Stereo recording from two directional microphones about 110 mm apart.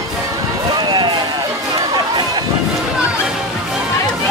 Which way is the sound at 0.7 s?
40° right (ahead or behind).